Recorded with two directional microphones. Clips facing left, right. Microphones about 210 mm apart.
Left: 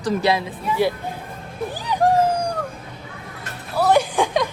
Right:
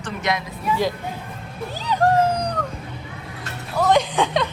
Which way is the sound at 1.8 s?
15° left (ahead or behind).